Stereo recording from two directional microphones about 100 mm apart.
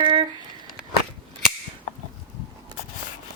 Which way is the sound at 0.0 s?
55° right (ahead or behind).